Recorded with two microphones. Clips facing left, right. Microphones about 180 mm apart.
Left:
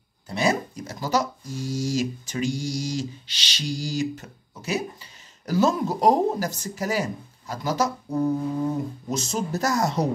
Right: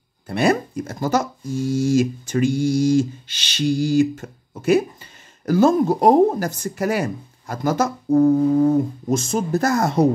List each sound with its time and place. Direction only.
0.3 s speech: 60° right (ahead or behind)